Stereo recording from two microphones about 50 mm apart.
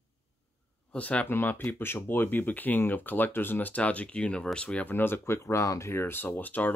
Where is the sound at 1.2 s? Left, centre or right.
Left.